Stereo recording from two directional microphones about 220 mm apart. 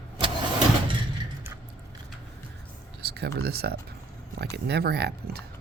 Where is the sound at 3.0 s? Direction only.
45° right (ahead or behind).